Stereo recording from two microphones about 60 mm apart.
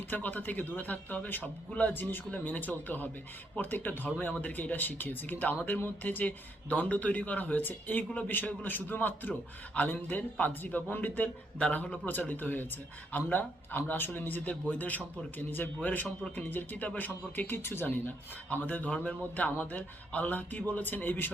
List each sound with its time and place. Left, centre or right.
0.1 s a man's voice: left